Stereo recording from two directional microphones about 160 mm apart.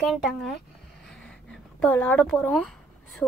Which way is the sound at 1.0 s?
5° left (ahead or behind).